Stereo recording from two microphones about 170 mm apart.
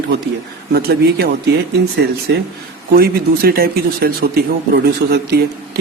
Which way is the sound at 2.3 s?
80° right.